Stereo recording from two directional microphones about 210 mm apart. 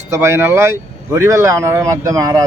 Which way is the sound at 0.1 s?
10° right (ahead or behind).